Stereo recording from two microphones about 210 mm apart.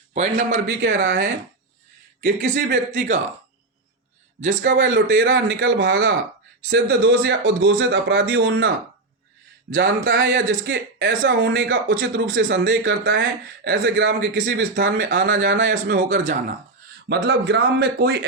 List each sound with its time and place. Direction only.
0.1 s a man's voice: 35° right (ahead or behind)
0.5 s a man's voice: 60° right (ahead or behind)
4.6 s speech: 55° right (ahead or behind)
9.7 s speech: 60° right (ahead or behind)
15.7 s speech: 40° right (ahead or behind)
17.1 s a man's voice: 50° right (ahead or behind)